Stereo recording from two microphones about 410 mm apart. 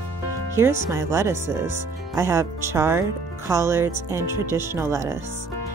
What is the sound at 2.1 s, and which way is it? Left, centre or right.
Speech, centre.